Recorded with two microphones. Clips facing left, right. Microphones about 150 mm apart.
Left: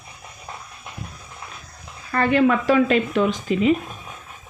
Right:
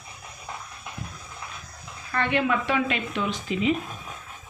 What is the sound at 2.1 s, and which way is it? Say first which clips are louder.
Speech: left 7 dB; 40° left (ahead or behind).